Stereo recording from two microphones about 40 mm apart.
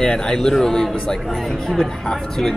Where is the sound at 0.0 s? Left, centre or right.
Centre.